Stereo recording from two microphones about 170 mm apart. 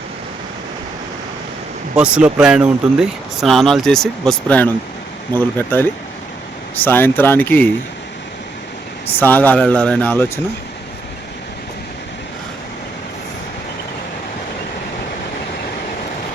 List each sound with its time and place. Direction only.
2.0 s speech: 5° right (ahead or behind); by 7.7 s 10° left (ahead or behind)
9.1 s speech: 10° left (ahead or behind)